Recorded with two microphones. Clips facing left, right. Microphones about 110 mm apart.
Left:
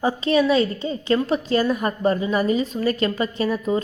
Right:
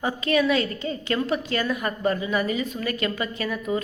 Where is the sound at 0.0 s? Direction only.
25° left (ahead or behind).